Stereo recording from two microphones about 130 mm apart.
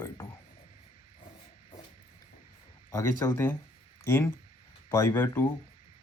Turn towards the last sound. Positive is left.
turn(degrees=15)  # may be behind; listen again after turning